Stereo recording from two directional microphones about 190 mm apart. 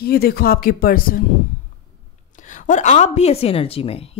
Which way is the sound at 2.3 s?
40° left (ahead or behind).